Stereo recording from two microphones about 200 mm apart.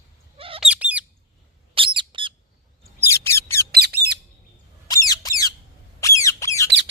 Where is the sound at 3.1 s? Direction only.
15° left (ahead or behind).